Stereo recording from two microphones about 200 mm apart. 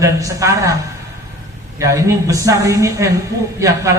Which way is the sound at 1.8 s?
15° right (ahead or behind).